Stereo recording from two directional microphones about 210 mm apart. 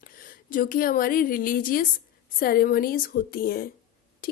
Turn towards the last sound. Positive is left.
turn(degrees=45)  # may be behind; listen again after turning